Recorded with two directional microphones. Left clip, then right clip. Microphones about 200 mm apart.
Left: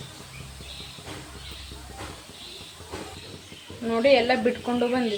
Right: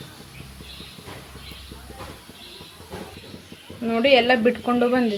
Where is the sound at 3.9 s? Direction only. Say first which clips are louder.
Right 3 dB; 30° right (ahead or behind).